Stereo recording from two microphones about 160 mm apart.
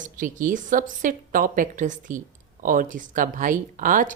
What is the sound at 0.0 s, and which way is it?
Speech, 55° right (ahead or behind).